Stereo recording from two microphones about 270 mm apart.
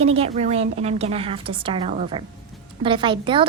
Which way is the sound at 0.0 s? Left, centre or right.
Right.